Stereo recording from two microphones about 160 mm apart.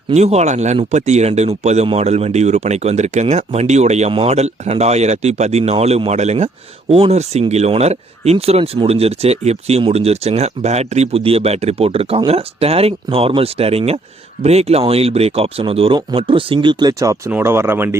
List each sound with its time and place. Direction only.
0.1 s speech: 45° right (ahead or behind); by 17.9 s 15° right (ahead or behind)